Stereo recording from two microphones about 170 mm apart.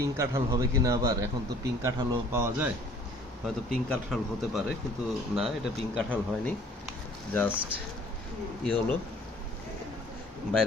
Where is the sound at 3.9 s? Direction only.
Centre (ahead or behind).